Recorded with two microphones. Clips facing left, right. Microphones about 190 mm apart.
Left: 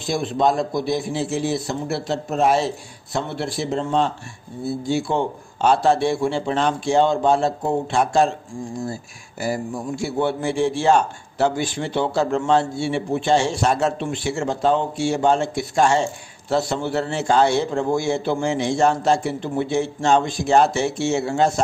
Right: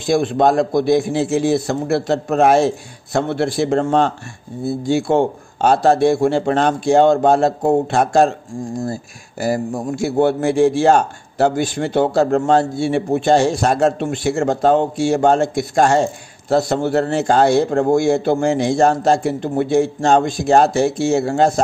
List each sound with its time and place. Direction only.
0.1 s a man's voice: 50° right (ahead or behind)
9.4 s a man's voice: 45° right (ahead or behind)
13.7 s a man's voice: 50° right (ahead or behind)